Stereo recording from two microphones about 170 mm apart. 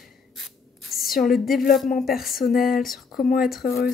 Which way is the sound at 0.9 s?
Centre (ahead or behind).